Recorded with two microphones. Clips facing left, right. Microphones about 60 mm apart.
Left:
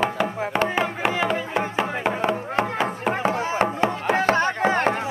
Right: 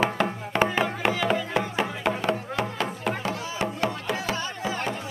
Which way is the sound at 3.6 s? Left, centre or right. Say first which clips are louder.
Left 6 dB; left.